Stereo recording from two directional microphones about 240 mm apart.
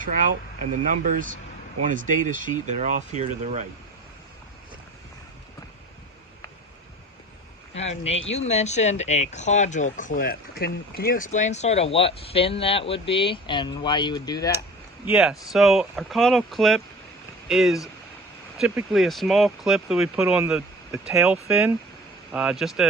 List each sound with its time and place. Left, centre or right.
0.9 s speech: right
7.7 s speech: left
15.0 s speech: centre